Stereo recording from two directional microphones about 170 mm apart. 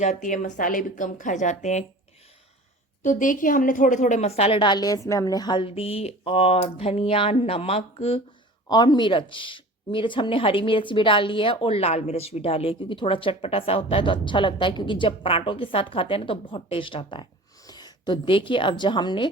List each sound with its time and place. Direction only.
0.0 s speech: 45° left (ahead or behind)
3.0 s a woman's voice: 50° left (ahead or behind)
8.7 s a woman's voice: 25° left (ahead or behind)